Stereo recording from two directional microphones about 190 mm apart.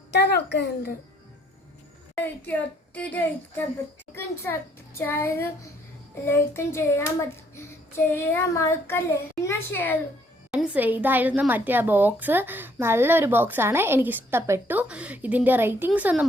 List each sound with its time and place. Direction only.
0.1 s a woman's voice: 60° left (ahead or behind)
2.1 s child singing: 10° left (ahead or behind)
10.5 s a woman's voice: 5° right (ahead or behind)